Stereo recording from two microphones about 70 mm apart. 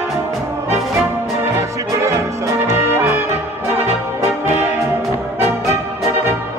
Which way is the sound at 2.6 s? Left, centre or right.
Right.